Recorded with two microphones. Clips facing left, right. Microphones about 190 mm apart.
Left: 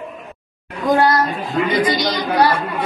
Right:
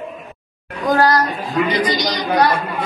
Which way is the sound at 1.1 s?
25° left (ahead or behind).